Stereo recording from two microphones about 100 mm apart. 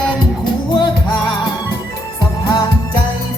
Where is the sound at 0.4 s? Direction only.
50° left (ahead or behind).